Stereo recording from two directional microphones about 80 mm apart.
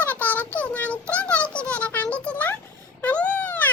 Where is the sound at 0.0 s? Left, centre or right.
Left.